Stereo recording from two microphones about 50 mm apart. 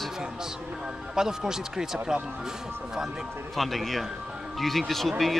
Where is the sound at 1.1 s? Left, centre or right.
Centre.